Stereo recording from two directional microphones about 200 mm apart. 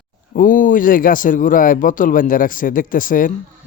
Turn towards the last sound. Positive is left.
turn(degrees=45)  # may be behind; listen again after turning